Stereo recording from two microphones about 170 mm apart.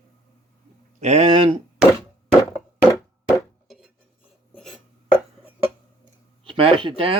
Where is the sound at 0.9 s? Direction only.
40° right (ahead or behind).